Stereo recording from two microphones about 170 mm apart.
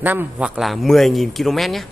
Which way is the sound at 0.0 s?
10° right (ahead or behind).